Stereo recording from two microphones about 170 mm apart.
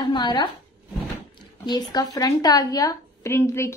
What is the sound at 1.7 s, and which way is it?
A woman's voice, 25° left (ahead or behind).